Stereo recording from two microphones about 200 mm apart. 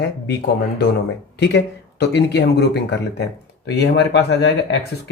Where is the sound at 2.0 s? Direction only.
55° left (ahead or behind).